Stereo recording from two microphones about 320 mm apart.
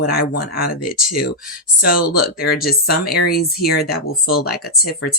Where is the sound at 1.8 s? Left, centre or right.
Left.